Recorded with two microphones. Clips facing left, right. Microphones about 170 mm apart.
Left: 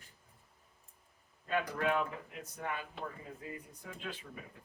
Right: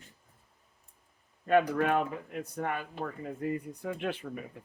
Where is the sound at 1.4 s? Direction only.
60° right (ahead or behind).